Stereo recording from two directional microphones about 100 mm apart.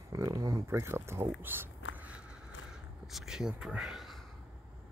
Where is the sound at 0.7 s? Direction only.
25° right (ahead or behind).